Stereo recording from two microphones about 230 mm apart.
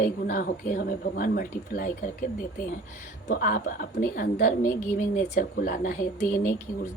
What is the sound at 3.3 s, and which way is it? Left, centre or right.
A woman's voice, left.